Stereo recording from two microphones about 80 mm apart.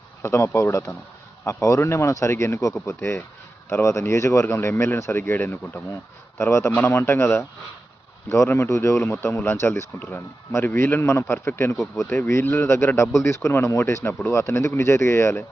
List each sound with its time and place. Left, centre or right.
0.2 s speech: left